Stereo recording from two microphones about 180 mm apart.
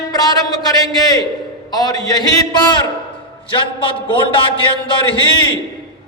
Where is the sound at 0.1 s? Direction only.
20° left (ahead or behind).